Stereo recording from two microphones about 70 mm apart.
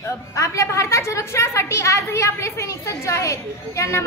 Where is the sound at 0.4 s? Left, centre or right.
Left.